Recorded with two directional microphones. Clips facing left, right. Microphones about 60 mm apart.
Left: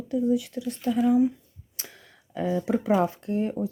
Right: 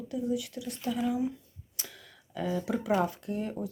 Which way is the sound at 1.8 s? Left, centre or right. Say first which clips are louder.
Left 1 dB; left.